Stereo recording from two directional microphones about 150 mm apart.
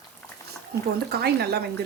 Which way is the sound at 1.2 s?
90° right.